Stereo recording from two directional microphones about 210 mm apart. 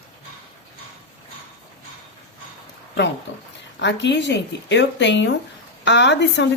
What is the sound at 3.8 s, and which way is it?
A woman's voice, 55° left (ahead or behind).